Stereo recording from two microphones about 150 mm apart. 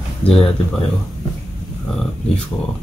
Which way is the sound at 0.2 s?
40° left (ahead or behind).